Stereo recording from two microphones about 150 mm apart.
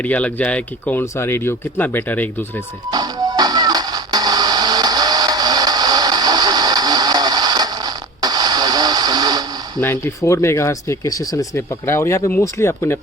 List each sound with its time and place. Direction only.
0.0 s speech: 10° left (ahead or behind)
2.9 s music: 25° right (ahead or behind)
9.8 s speech: 20° left (ahead or behind)